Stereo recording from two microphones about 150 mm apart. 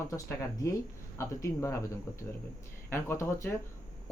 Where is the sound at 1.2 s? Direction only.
20° left (ahead or behind).